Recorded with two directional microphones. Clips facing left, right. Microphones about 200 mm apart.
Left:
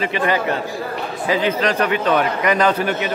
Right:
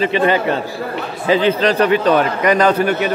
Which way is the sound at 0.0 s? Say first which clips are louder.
Right 4 dB; 30° right (ahead or behind).